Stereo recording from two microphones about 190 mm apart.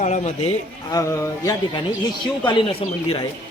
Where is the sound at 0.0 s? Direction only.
35° left (ahead or behind).